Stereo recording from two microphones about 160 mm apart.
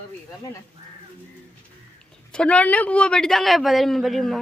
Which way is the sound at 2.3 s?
10° left (ahead or behind).